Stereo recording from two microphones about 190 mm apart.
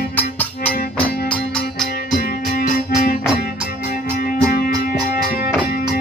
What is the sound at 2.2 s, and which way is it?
Music, 50° left (ahead or behind).